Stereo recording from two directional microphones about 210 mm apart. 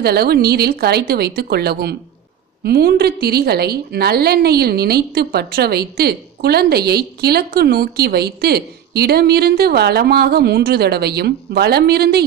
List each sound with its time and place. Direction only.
0.0 s a woman's voice: 50° right (ahead or behind)